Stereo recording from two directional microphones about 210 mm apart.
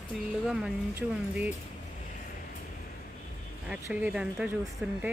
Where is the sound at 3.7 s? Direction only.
5° right (ahead or behind).